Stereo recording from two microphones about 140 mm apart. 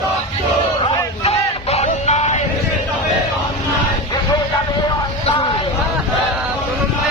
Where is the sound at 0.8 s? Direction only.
45° left (ahead or behind).